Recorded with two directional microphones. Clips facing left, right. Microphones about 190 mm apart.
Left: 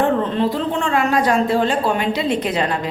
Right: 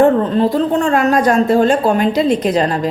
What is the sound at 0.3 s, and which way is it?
A woman's voice, 40° right (ahead or behind).